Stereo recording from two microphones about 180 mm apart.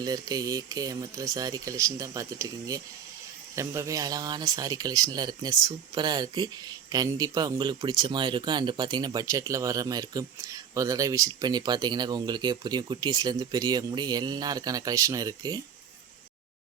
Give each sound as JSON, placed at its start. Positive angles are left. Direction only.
{"t": 0.0, "sound": "speech", "side_deg": -20}